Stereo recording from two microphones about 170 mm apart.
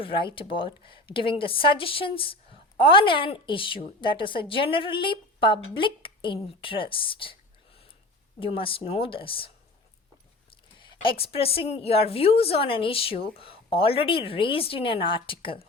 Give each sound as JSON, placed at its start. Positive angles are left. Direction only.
{"t": 0.0, "sound": "a woman's voice", "side_deg": 30}
{"t": 8.4, "sound": "a woman's voice", "side_deg": 30}
{"t": 10.8, "sound": "a woman's voice", "side_deg": 30}